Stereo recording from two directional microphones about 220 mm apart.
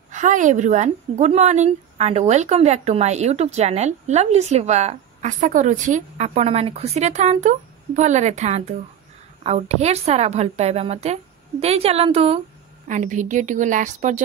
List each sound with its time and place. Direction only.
0.1 s a woman's voice: 35° right (ahead or behind)